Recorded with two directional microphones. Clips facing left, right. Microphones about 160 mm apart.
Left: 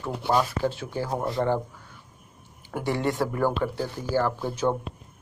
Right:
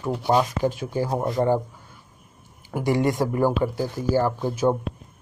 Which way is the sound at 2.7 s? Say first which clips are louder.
Right 4 dB; 10° right (ahead or behind).